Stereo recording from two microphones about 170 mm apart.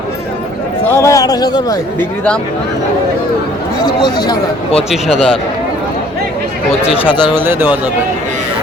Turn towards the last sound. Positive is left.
turn(degrees=-10)  # may be behind; listen again after turning